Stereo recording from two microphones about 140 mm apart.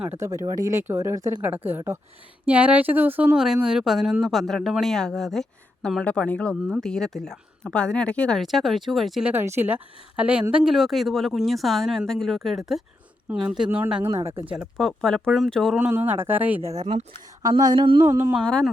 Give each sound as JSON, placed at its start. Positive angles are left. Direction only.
{"t": 0.2, "sound": "speech", "side_deg": -20}
{"t": 9.3, "sound": "speech", "side_deg": -15}
{"t": 14.8, "sound": "speech", "side_deg": 5}
{"t": 15.7, "sound": "speech", "side_deg": -10}
{"t": 16.8, "sound": "speech", "side_deg": -50}
{"t": 17.6, "sound": "a sound", "side_deg": -30}
{"t": 18.0, "sound": "speech", "side_deg": -20}
{"t": 18.4, "sound": "speech", "side_deg": 5}